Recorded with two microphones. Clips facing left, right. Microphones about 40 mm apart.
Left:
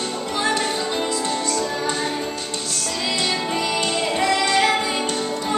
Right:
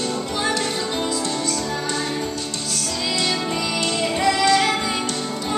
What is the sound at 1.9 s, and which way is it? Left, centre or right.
Music, centre.